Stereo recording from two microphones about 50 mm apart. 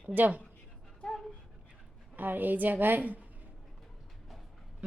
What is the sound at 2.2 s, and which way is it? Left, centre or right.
A woman's voice, right.